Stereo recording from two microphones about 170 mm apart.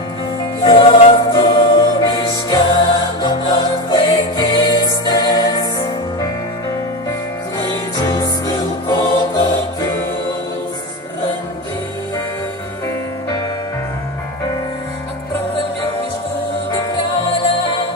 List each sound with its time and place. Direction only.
0.7 s music: 30° left (ahead or behind)
7.5 s music: 25° left (ahead or behind)
17.5 s music: 30° left (ahead or behind)